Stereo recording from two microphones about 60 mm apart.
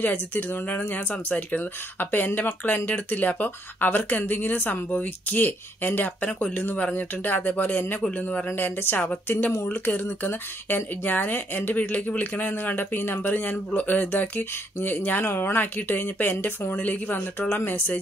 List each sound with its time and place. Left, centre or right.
0.0 s speech: left
8.5 s speech: left